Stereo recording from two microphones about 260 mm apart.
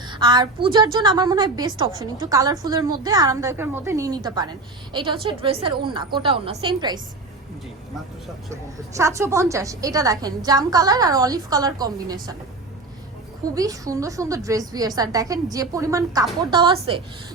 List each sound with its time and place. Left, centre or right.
0.1 s a woman's voice: centre
9.0 s a woman's voice: centre
13.6 s a woman's voice: centre